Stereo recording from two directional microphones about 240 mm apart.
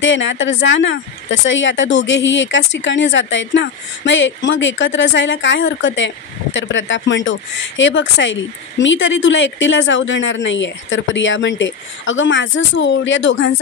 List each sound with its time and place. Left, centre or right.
0.0 s speech: left